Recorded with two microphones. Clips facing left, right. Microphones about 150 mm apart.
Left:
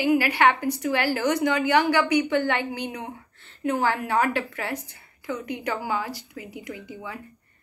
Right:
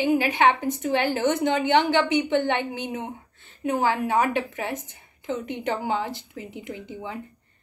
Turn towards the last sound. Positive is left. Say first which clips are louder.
# right 2 dB
turn(degrees=-25)  # may be behind; listen again after turning